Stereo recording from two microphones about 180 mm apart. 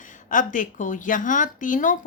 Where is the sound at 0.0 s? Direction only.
45° left (ahead or behind).